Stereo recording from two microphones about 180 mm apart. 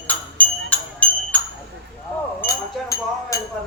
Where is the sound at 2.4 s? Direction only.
15° left (ahead or behind).